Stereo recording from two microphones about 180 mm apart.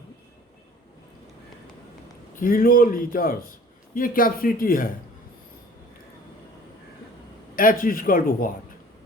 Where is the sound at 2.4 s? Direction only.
50° left (ahead or behind).